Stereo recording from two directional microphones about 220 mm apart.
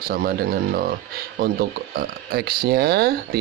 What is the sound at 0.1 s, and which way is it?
Speech, 45° right (ahead or behind).